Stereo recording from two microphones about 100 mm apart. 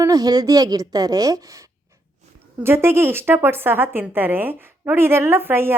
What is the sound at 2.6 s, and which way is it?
A woman's voice, 25° right (ahead or behind).